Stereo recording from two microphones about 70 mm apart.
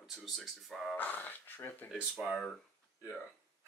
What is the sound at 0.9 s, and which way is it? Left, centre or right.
Speech, left.